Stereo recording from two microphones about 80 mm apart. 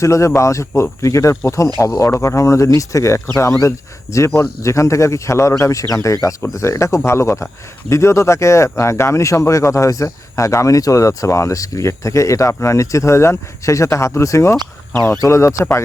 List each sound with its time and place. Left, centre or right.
0.0 s speech: left